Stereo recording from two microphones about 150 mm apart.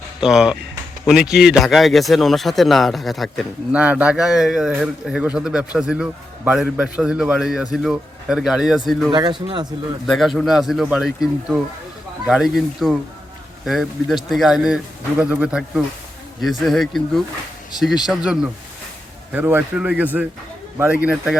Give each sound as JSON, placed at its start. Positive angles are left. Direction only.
{"t": 0.2, "sound": "speech", "side_deg": -5}
{"t": 9.0, "sound": "speech", "side_deg": -30}
{"t": 10.1, "sound": "a man's voice", "side_deg": 0}